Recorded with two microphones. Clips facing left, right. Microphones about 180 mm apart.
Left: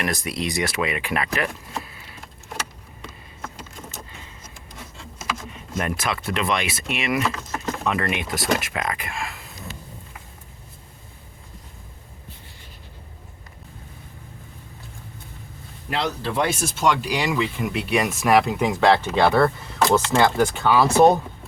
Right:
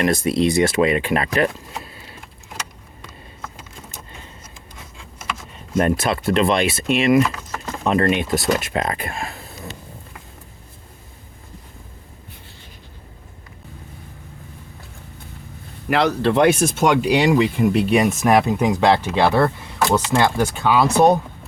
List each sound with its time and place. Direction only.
0.0 s speech: 30° right (ahead or behind)
5.7 s speech: 30° right (ahead or behind)
15.9 s speech: 75° right (ahead or behind); by 17.7 s 40° right (ahead or behind)
17.9 s speech: 20° right (ahead or behind)